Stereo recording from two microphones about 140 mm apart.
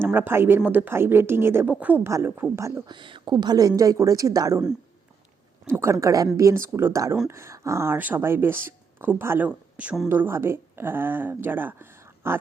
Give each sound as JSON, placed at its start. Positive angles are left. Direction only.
{"t": 0.0, "sound": "speech", "side_deg": -15}
{"t": 2.8, "sound": "a woman's voice", "side_deg": -35}
{"t": 5.7, "sound": "a woman's voice", "side_deg": -20}
{"t": 10.1, "sound": "speech", "side_deg": -15}